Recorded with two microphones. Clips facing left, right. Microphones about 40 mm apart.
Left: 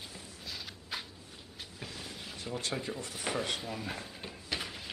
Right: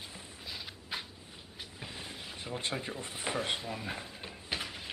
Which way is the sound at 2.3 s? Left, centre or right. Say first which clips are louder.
Left 1 dB; centre.